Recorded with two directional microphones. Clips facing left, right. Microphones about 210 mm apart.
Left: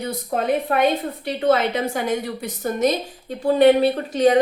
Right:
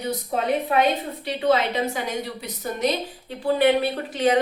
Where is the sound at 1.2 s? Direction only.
50° left (ahead or behind).